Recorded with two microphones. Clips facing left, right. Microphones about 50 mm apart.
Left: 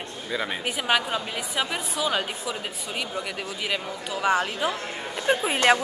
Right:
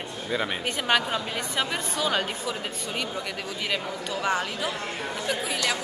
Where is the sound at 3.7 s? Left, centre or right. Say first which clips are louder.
Right 1 dB; centre.